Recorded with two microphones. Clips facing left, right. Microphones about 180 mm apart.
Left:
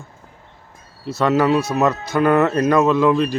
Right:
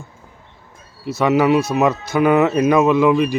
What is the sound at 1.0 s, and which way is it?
Speech, 15° right (ahead or behind).